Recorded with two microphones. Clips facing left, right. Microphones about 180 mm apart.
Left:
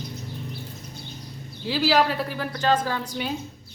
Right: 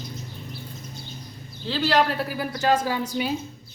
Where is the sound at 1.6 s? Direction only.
10° left (ahead or behind).